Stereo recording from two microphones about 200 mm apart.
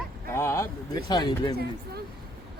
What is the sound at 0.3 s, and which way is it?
Speech, 15° left (ahead or behind).